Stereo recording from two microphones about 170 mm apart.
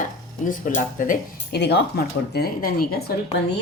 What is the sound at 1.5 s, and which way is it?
Cutlery, 80° left.